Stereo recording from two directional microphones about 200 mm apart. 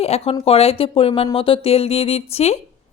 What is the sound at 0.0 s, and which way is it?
Speech, 30° left (ahead or behind).